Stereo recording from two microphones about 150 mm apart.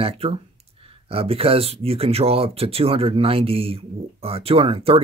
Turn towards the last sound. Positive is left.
turn(degrees=-40)  # may be behind; listen again after turning